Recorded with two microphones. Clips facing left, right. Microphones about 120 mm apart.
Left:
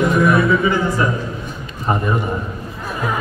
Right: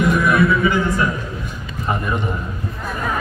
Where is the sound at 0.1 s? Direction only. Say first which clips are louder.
Left 2 dB; 30° left (ahead or behind).